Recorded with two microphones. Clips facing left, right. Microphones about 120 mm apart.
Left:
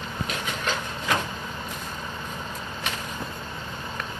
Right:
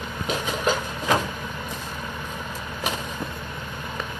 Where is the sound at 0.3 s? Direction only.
5° right (ahead or behind).